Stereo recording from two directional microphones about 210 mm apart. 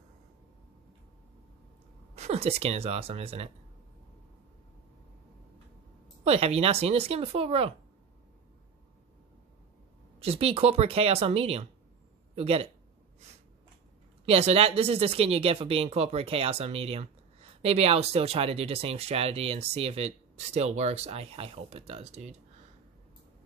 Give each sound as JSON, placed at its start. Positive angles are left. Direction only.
{"t": 2.1, "sound": "speech", "side_deg": -30}
{"t": 6.2, "sound": "speech", "side_deg": -30}
{"t": 10.2, "sound": "speech", "side_deg": -30}
{"t": 14.2, "sound": "speech", "side_deg": -30}